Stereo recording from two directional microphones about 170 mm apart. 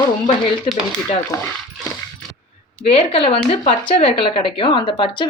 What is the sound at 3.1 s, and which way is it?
Speech, 35° left (ahead or behind).